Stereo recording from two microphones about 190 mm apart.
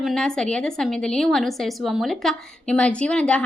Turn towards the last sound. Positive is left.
turn(degrees=5)  # may be behind; listen again after turning